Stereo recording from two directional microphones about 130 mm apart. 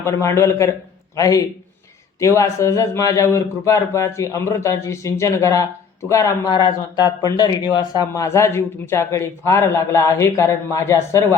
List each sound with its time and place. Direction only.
0.0 s speech: 25° left (ahead or behind)